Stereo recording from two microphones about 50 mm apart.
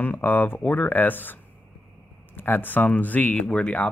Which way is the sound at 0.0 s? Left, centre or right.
Left.